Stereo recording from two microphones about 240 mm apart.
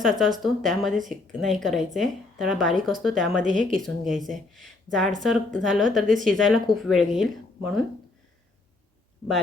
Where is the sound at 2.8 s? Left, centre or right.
Right.